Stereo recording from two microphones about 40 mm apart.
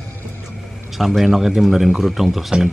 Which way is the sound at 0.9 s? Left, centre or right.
Centre.